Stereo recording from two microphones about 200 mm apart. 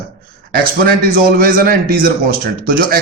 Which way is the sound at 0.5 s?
45° right (ahead or behind).